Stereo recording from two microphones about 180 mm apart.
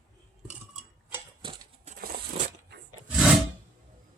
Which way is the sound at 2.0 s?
60° right (ahead or behind).